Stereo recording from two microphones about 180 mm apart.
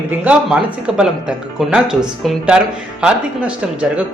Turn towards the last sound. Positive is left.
turn(degrees=-5)  # may be behind; listen again after turning